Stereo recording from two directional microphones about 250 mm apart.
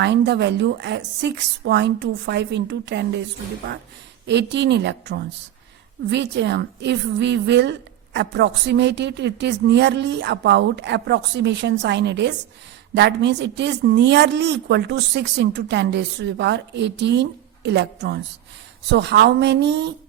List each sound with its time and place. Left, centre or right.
0.0 s a woman's voice: right
4.3 s a woman's voice: right